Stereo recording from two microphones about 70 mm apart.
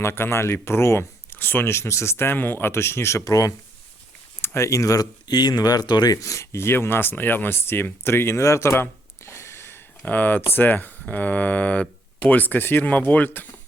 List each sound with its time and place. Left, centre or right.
0.0 s speech: left
3.2 s speech: left
4.4 s speech: left
6.2 s speech: left
10.1 s speech: left